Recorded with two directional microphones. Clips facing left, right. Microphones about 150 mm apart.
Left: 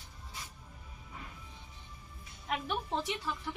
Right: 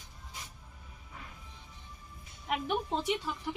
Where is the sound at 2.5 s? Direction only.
15° right (ahead or behind).